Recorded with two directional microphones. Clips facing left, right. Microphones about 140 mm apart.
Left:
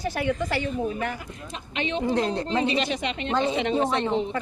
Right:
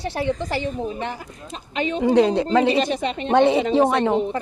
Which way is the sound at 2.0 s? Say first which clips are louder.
Right 9 dB; 80° right.